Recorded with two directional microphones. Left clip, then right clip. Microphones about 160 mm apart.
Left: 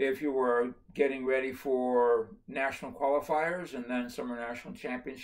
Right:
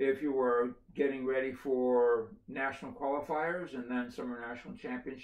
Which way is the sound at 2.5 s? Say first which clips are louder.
Left 4 dB; 15° left (ahead or behind).